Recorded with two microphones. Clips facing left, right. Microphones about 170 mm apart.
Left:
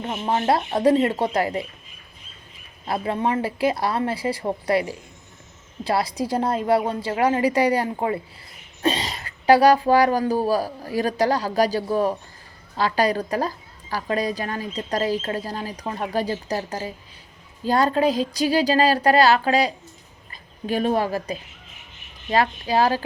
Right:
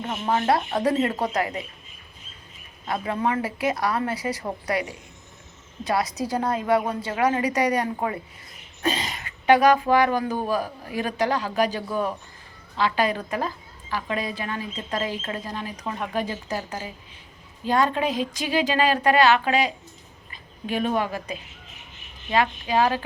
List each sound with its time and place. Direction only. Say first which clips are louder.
0.0 s speech: left 1 dB; 25° left (ahead or behind)
2.8 s a woman's voice: left 2 dB; 30° left (ahead or behind)